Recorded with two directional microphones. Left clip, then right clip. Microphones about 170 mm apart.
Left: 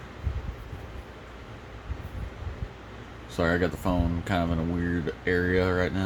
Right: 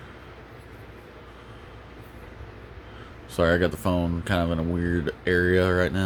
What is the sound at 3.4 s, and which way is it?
Speech, 45° right (ahead or behind).